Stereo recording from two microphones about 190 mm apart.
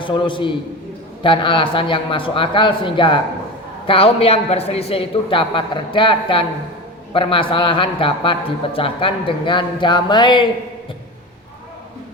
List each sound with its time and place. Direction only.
0.0 s a man's voice: 25° left (ahead or behind)